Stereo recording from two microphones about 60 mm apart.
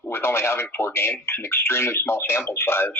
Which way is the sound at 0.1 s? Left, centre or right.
Left.